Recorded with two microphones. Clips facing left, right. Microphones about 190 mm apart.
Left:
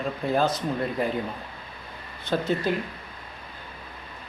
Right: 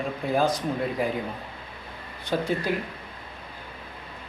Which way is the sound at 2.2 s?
10° right (ahead or behind).